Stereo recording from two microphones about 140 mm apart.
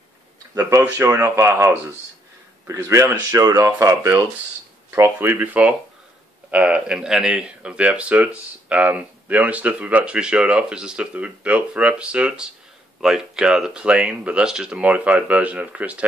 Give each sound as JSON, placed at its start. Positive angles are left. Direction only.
{"t": 0.6, "sound": "speech", "side_deg": -20}